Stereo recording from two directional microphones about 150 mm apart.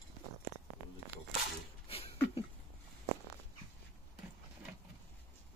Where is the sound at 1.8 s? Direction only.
40° left (ahead or behind).